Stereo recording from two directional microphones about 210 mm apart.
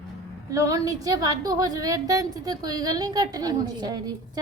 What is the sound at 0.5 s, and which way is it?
A woman's voice, 15° right (ahead or behind).